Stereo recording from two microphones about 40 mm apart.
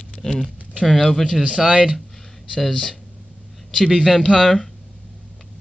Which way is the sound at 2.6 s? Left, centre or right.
Centre.